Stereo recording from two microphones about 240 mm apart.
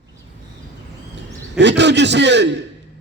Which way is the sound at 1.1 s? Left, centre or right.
Right.